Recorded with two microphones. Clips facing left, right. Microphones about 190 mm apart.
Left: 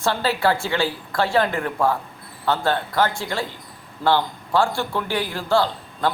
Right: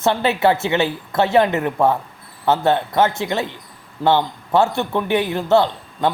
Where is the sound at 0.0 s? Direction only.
20° right (ahead or behind).